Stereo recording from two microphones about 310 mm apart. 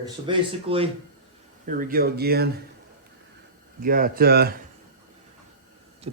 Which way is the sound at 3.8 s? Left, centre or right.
Right.